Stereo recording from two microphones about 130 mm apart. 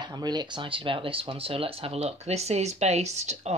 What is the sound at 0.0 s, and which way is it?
Speech, 35° right (ahead or behind).